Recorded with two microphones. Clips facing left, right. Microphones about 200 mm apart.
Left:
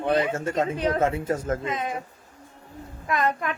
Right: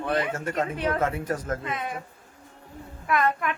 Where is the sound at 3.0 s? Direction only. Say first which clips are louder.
Right 1 dB; 25° left (ahead or behind).